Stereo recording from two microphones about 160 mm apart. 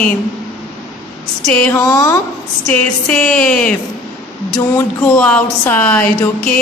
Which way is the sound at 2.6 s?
10° left (ahead or behind).